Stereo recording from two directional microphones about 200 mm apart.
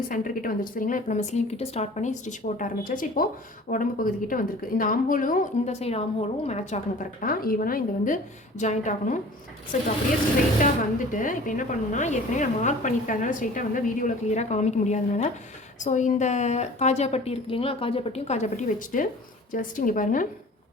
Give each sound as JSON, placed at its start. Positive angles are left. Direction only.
{"t": 0.1, "sound": "speech", "side_deg": 45}
{"t": 11.1, "sound": "speech", "side_deg": 40}